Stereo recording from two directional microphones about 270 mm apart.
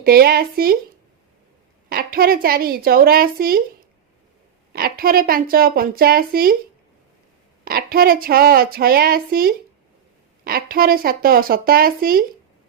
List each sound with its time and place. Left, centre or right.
0.0 s a woman's voice: right
1.9 s a woman's voice: right
7.6 s a woman's voice: right